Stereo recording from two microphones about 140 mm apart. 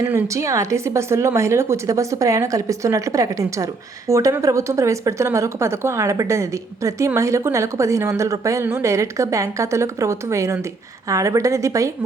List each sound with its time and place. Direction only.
0.0 s a woman's voice: 20° right (ahead or behind)